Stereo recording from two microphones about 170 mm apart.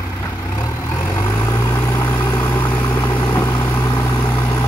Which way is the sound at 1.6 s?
20° left (ahead or behind).